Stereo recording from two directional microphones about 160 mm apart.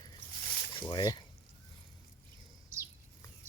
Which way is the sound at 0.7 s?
30° left (ahead or behind).